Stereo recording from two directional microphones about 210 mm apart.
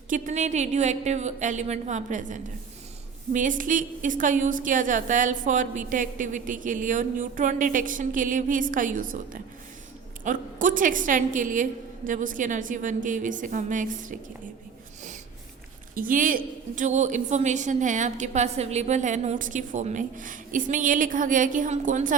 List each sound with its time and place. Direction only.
0.1 s a woman's voice: 35° right (ahead or behind)
16.0 s a woman's voice: 40° right (ahead or behind)